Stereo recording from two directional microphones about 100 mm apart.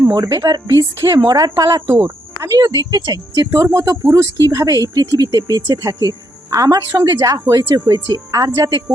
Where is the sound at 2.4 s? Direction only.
30° right (ahead or behind).